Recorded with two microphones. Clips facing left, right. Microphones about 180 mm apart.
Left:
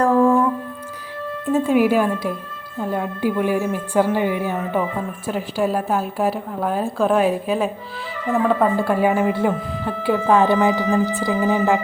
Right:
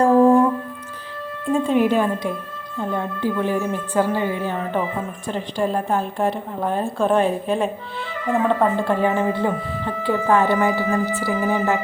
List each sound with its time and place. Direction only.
0.0 s music: 35° right (ahead or behind)
1.5 s a woman's voice: 5° left (ahead or behind)